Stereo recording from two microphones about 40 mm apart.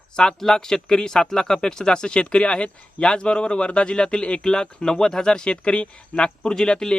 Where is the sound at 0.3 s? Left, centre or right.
Centre.